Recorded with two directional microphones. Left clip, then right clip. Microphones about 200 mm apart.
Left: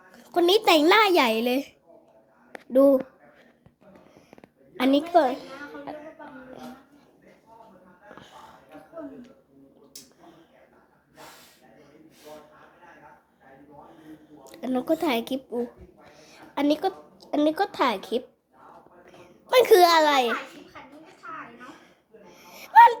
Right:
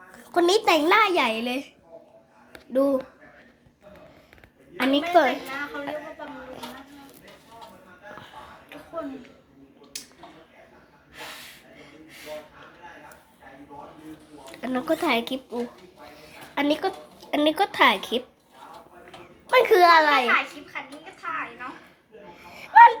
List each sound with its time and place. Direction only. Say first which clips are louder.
0.1 s a sound: even; 15° left (ahead or behind)
0.6 s a woman's voice: left 1 dB; 35° left (ahead or behind)
2.7 s a woman's voice: left 4 dB; 35° left (ahead or behind)
4.8 s a woman's voice: right 1 dB; 20° left (ahead or behind)
14.5 s a woman's voice: even; 30° left (ahead or behind)
19.5 s a woman's voice: right 1 dB; 35° left (ahead or behind)
22.3 s wheeze: right 2 dB; 30° left (ahead or behind)